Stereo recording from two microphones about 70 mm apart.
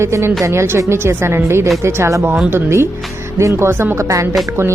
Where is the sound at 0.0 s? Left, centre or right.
Right.